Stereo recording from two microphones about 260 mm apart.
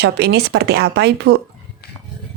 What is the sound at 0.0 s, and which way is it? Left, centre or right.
Speech, right.